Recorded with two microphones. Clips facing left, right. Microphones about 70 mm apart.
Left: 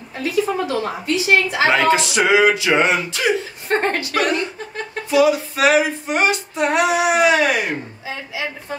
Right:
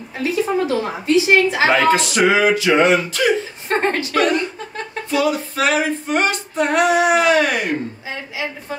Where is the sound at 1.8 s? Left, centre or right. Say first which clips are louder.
Right 1 dB; centre.